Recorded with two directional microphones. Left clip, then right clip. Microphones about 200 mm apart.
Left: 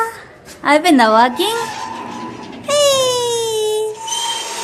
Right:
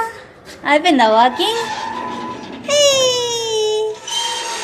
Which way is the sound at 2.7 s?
20° left (ahead or behind).